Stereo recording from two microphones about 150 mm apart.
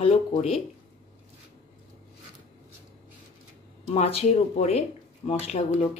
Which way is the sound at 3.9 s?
45° left (ahead or behind).